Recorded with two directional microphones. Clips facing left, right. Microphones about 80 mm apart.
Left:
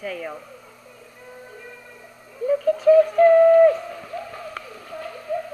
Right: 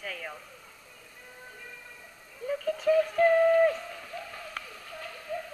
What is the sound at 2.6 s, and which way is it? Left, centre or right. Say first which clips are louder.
Synthetic singing: left 10 dB; left.